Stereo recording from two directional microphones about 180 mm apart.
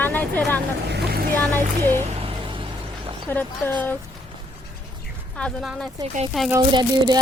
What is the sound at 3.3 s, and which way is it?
Speech, 10° left (ahead or behind).